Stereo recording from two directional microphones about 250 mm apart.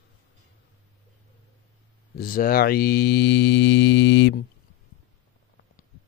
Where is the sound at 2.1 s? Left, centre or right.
Left.